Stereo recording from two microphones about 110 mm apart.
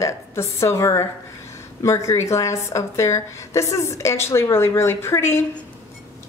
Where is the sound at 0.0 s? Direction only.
25° left (ahead or behind).